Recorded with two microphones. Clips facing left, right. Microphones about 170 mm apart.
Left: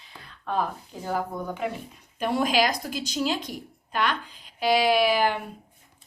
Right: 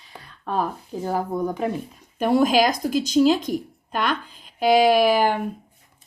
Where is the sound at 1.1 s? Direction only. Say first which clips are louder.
Right 5 dB; 35° right (ahead or behind).